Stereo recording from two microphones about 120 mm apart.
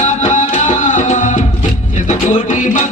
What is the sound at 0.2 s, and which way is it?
Music, 85° left.